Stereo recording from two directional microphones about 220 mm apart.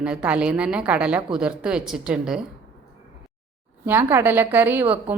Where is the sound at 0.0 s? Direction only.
5° right (ahead or behind).